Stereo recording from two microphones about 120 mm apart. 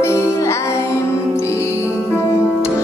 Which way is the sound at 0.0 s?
20° left (ahead or behind).